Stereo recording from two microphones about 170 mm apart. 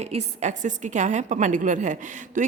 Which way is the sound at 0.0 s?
40° right (ahead or behind).